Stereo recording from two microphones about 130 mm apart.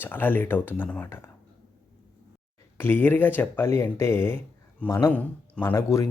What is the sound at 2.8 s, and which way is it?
Speech, 15° left (ahead or behind).